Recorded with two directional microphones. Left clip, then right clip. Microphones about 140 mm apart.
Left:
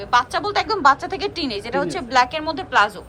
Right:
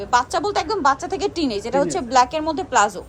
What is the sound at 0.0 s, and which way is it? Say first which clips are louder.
A woman's voice: even; 30° right (ahead or behind).